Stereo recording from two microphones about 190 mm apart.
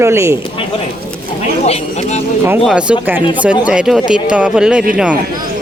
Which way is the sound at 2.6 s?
5° right (ahead or behind).